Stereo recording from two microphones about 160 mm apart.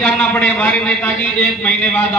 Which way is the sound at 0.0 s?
5° left (ahead or behind).